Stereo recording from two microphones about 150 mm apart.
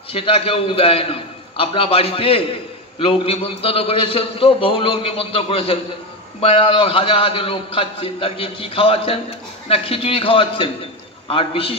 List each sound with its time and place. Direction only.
0.1 s a man's voice: 40° left (ahead or behind)